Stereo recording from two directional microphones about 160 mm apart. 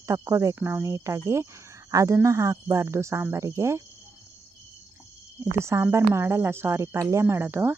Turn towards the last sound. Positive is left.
turn(degrees=-15)  # may be behind; listen again after turning